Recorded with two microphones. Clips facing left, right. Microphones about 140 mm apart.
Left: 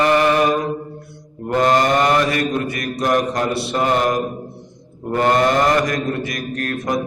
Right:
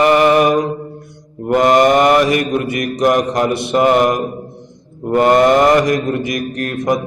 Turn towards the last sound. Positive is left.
turn(degrees=-15)  # may be behind; listen again after turning